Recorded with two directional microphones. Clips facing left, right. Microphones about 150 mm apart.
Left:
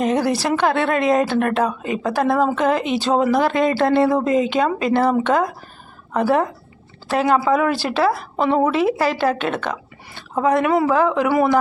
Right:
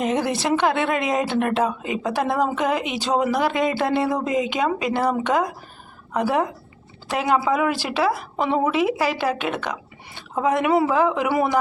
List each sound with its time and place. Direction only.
0.0 s a woman's voice: 20° right (ahead or behind)